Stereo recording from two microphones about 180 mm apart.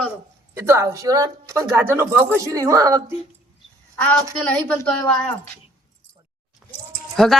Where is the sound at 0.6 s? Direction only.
15° right (ahead or behind).